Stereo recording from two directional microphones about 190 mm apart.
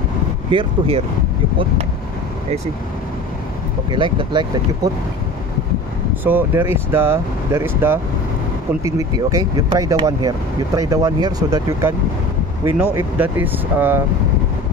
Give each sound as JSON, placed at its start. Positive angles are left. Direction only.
{"t": 0.5, "sound": "speech", "side_deg": -30}
{"t": 3.9, "sound": "speech", "side_deg": -25}
{"t": 6.2, "sound": "speech", "side_deg": -10}